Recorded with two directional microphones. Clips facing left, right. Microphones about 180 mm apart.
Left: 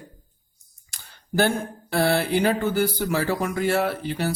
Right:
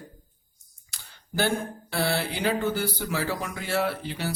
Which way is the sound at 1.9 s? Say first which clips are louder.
Left 7 dB; 45° left (ahead or behind).